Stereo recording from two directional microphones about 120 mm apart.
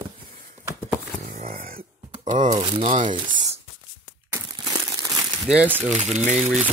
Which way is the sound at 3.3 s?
90° right.